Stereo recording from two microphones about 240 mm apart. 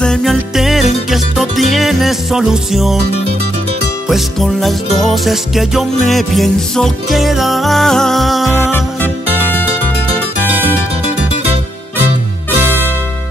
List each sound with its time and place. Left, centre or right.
0.0 s music: centre
4.1 s music: centre